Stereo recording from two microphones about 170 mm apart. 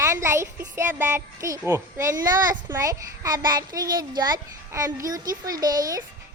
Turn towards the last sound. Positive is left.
turn(degrees=-20)  # may be behind; listen again after turning